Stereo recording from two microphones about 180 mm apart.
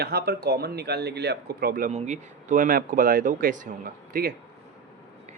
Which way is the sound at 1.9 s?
45° right (ahead or behind).